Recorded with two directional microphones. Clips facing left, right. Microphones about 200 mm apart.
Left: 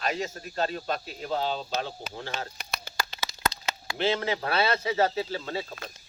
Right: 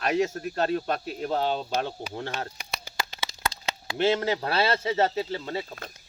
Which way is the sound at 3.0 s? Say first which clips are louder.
Even; 25° right (ahead or behind).